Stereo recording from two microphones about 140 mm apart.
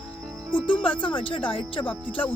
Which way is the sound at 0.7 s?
40° left (ahead or behind).